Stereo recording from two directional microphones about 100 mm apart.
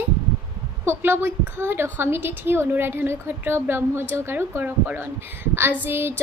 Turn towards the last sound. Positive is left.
turn(degrees=-20)  # may be behind; listen again after turning